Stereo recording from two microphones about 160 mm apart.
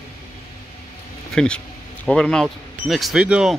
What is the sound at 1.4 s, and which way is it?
Speech, 5° left (ahead or behind).